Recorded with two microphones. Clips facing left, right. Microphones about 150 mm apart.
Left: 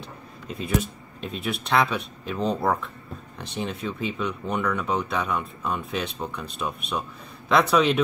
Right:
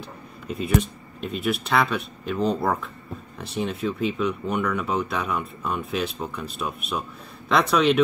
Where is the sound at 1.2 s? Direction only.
Centre (ahead or behind).